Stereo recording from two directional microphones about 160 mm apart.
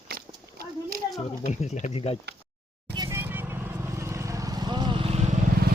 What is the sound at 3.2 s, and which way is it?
Vehicle, 15° right (ahead or behind).